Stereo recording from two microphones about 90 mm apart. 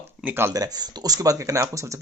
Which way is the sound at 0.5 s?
45° right (ahead or behind).